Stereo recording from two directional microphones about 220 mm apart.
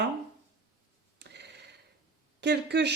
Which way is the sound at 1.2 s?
50° right (ahead or behind).